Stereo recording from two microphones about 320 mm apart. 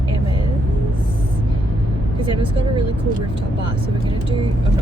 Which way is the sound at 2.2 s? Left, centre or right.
Centre.